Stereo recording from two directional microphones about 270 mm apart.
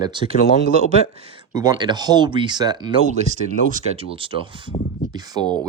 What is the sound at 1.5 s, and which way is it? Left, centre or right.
Speech, centre.